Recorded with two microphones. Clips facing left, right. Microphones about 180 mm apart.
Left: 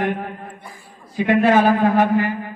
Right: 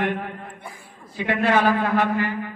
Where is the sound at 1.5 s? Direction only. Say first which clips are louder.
Left 5 dB; 45° left (ahead or behind).